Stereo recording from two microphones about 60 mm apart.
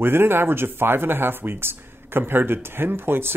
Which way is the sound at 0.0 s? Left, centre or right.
Right.